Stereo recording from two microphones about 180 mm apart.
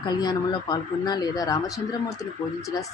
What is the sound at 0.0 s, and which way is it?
Speech, 25° left (ahead or behind).